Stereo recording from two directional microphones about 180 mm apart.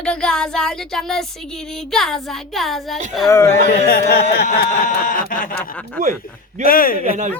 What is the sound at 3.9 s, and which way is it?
Speech, 60° left (ahead or behind).